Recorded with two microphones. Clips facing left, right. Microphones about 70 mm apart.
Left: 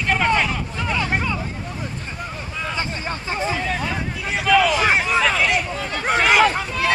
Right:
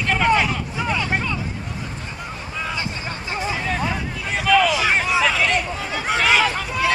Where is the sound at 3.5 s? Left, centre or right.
Centre.